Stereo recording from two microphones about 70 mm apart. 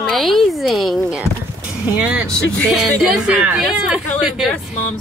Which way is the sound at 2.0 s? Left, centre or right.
Right.